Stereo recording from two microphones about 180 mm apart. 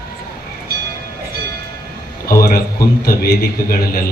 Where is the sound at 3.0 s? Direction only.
55° left (ahead or behind).